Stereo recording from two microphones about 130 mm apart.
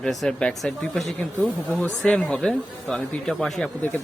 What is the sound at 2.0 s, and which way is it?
A man's voice, 10° left (ahead or behind).